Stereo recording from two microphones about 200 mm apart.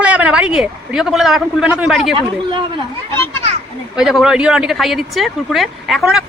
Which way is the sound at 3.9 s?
5° right (ahead or behind).